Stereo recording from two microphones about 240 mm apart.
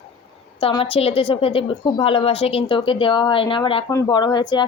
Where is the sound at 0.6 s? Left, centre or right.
Left.